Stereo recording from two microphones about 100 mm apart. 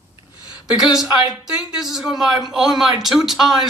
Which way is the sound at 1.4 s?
5° right (ahead or behind).